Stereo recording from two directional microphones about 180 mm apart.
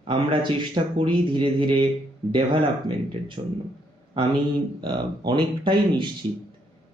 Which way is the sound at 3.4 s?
25° right (ahead or behind).